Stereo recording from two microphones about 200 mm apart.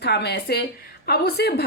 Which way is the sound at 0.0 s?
55° left (ahead or behind).